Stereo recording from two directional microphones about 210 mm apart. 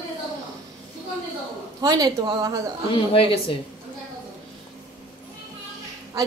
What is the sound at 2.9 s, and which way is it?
Speech, 25° left (ahead or behind).